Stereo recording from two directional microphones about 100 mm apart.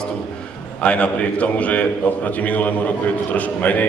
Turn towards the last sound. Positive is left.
turn(degrees=15)  # may be behind; listen again after turning